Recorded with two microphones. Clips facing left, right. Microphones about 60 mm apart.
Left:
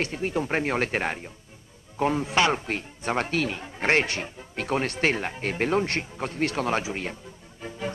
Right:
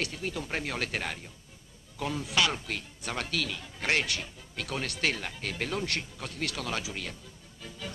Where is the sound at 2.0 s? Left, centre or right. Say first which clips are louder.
Left 6 dB; left.